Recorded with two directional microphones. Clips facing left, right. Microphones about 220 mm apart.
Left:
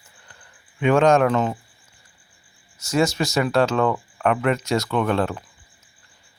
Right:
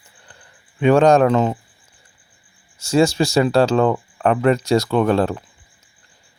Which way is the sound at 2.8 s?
30° right (ahead or behind).